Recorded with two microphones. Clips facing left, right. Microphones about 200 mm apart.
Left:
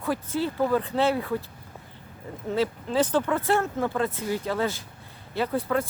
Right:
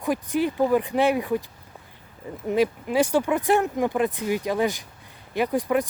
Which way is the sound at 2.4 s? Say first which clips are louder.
Right 4 dB; 15° right (ahead or behind).